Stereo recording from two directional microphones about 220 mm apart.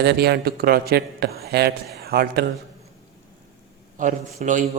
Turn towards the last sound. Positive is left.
turn(degrees=-35)  # may be behind; listen again after turning